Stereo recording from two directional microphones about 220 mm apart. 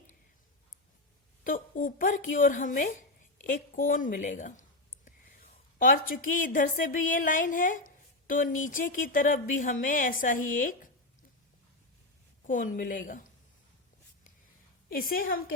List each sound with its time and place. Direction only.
1.5 s speech: 40° left (ahead or behind)
5.8 s speech: 40° left (ahead or behind)
12.5 s speech: 40° left (ahead or behind)
14.9 s speech: 40° left (ahead or behind)